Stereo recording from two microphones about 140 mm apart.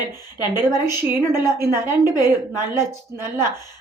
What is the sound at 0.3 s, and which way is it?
A woman's voice, 30° left (ahead or behind).